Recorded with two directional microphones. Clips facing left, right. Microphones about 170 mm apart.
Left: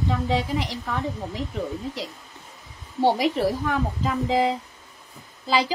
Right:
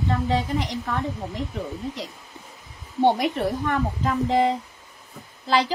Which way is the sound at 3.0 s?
5° left (ahead or behind).